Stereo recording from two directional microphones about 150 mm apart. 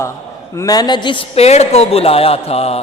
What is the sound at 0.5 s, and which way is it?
Music, 25° left (ahead or behind).